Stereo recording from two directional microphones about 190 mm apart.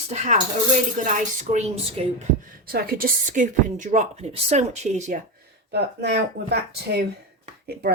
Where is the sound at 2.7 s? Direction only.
50° right (ahead or behind); by 5.1 s 35° right (ahead or behind).